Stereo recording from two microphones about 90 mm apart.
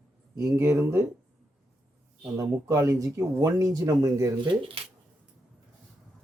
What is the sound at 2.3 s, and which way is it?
Speech, 35° right (ahead or behind).